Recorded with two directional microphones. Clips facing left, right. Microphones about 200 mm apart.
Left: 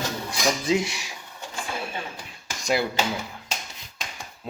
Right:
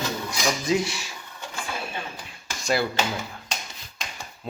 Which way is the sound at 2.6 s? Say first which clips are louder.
Even; 15° left (ahead or behind).